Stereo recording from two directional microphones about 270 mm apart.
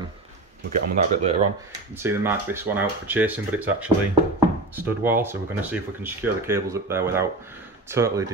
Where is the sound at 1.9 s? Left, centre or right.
Centre.